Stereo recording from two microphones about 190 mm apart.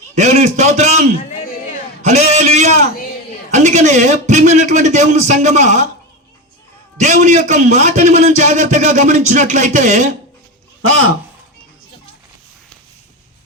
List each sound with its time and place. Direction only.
0.1 s a man's voice: 40° right (ahead or behind)
2.0 s a sound: 35° right (ahead or behind)
7.0 s a man's voice: 40° right (ahead or behind)